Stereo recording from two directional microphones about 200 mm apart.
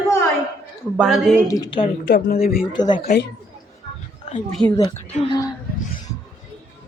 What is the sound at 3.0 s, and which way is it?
Speech, 50° left (ahead or behind).